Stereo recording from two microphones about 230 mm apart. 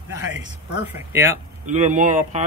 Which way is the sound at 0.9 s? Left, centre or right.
Centre.